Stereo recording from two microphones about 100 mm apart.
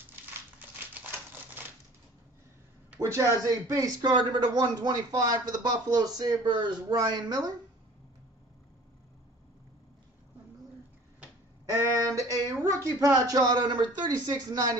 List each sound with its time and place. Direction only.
0.1 s crumpling: 20° right (ahead or behind)
3.0 s a man's voice: 30° right (ahead or behind)
11.9 s a sound: 35° right (ahead or behind)